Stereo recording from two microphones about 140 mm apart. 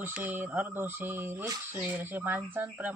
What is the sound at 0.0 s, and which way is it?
Speech, 15° right (ahead or behind).